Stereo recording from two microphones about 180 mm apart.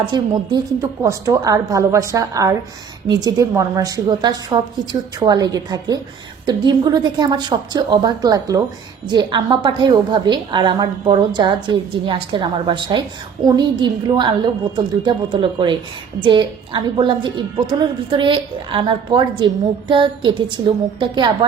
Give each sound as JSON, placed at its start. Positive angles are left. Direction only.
{"t": 0.0, "sound": "a woman's voice", "side_deg": -25}